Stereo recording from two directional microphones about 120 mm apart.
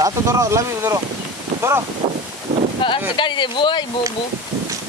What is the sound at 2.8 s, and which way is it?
Speech, 45° left (ahead or behind).